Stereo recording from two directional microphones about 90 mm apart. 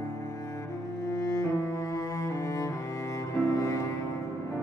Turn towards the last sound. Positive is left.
turn(degrees=35)  # may be behind; listen again after turning